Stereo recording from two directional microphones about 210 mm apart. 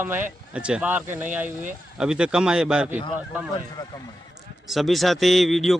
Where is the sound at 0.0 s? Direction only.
10° right (ahead or behind).